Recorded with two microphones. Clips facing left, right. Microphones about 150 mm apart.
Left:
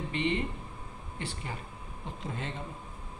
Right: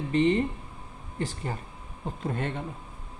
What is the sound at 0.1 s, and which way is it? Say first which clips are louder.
Speech: right 9 dB; 40° right (ahead or behind).